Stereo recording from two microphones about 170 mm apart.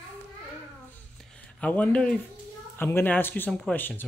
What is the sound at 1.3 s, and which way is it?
Speech, 5° left (ahead or behind).